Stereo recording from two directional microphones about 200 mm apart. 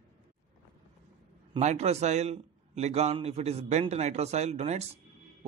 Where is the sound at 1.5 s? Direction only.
35° right (ahead or behind).